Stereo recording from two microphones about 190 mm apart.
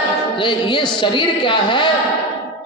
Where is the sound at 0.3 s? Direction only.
25° left (ahead or behind).